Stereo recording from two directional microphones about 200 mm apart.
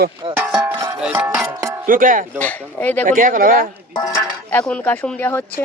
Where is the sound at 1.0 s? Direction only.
5° right (ahead or behind).